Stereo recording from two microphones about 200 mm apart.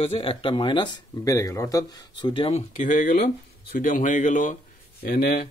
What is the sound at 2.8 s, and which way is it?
Speech, 40° left (ahead or behind).